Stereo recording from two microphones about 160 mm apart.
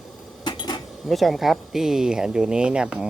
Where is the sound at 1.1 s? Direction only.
Centre (ahead or behind).